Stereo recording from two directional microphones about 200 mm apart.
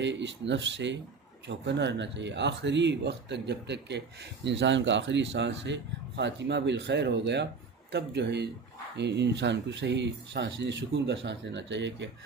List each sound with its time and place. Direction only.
0.0 s speech: 65° right (ahead or behind)